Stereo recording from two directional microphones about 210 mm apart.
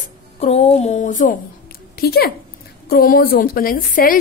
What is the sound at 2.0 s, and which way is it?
A woman's voice, 45° left (ahead or behind).